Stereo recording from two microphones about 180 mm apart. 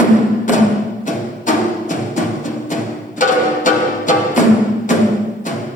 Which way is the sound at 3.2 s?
45° left (ahead or behind).